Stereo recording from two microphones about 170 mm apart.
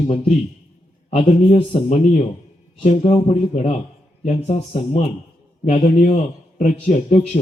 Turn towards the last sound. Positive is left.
turn(degrees=40)  # may be behind; listen again after turning